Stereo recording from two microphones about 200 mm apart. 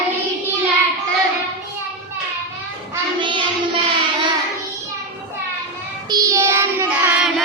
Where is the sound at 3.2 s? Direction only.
25° right (ahead or behind).